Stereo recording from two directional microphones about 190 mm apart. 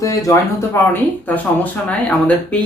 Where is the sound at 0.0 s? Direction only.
15° left (ahead or behind).